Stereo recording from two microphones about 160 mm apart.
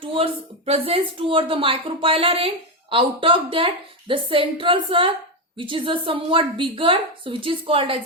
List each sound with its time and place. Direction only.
0.0 s speech: 35° right (ahead or behind)